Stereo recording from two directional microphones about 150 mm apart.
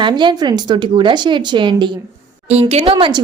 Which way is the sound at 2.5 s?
45° right (ahead or behind).